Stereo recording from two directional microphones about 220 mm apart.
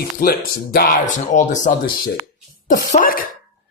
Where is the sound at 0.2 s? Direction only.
45° left (ahead or behind).